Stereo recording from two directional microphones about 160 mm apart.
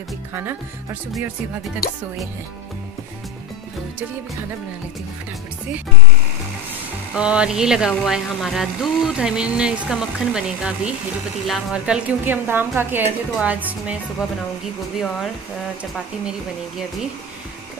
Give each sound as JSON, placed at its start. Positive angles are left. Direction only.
{"t": 0.3, "sound": "a woman's voice", "side_deg": -15}
{"t": 1.8, "sound": "speech", "side_deg": 70}
{"t": 7.2, "sound": "a woman's voice", "side_deg": -5}